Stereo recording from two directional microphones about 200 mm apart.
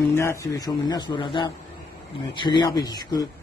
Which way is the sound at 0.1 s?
15° left (ahead or behind).